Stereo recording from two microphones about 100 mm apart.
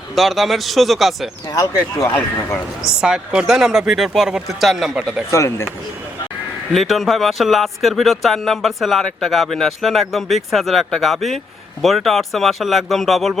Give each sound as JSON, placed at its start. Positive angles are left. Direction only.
{"t": 0.2, "sound": "speech", "side_deg": 0}
{"t": 1.5, "sound": "speech", "side_deg": 35}
{"t": 3.0, "sound": "speech", "side_deg": -5}
{"t": 5.3, "sound": "speech", "side_deg": 30}
{"t": 6.7, "sound": "speech", "side_deg": 0}